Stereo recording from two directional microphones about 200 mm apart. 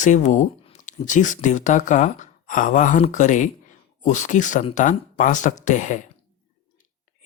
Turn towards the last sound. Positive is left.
turn(degrees=40)  # may be behind; listen again after turning